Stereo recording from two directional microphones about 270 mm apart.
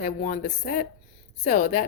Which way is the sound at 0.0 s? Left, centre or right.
Left.